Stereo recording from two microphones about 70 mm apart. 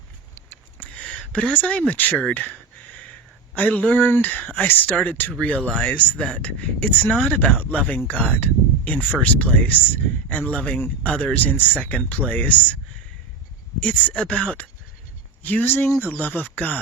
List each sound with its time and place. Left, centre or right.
0.8 s speech: centre
13.8 s speech: centre